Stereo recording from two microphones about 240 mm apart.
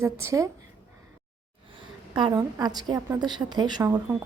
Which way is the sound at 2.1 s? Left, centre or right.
Centre.